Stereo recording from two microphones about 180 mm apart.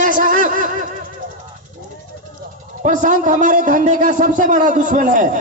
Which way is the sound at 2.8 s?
45° right (ahead or behind).